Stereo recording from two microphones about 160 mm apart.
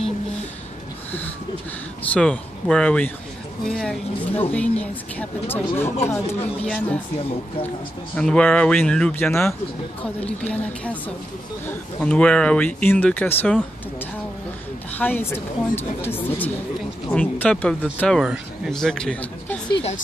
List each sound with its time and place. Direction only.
2.1 s speech: 5° left (ahead or behind)
8.2 s speech: 5° left (ahead or behind)
9.3 s speech: 15° left (ahead or behind)
15.0 s speech: 10° left (ahead or behind)
19.7 s speech: 40° left (ahead or behind)